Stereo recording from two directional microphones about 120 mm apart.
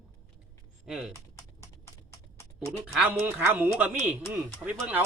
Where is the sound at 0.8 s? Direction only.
5° right (ahead or behind).